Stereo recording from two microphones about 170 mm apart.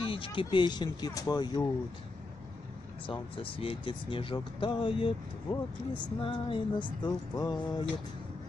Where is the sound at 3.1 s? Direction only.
30° left (ahead or behind).